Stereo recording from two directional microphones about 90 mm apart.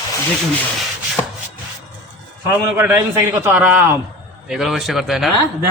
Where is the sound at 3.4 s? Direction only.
20° right (ahead or behind).